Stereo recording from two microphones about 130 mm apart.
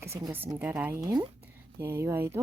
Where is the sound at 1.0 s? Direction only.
30° right (ahead or behind).